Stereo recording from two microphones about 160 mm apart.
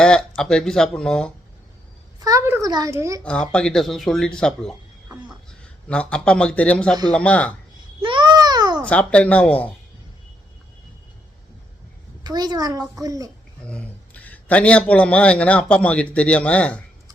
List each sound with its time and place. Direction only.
0.0 s speech: 5° left (ahead or behind)
2.2 s a woman's voice: 20° right (ahead or behind)
3.2 s speech: 5° left (ahead or behind)
5.9 s a man's voice: 5° left (ahead or behind)
8.0 s babbling: 30° right (ahead or behind)
8.8 s a man's voice: 5° left (ahead or behind)
12.2 s a woman's voice: 25° right (ahead or behind)
13.7 s a man's voice: 10° left (ahead or behind)